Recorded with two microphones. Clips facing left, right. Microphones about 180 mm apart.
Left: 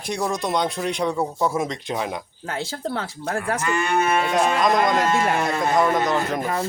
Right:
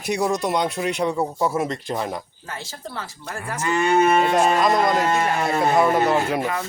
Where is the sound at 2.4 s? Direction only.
60° left (ahead or behind).